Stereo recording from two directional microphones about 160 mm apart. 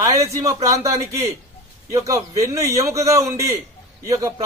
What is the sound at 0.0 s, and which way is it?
A man's voice, 20° right (ahead or behind).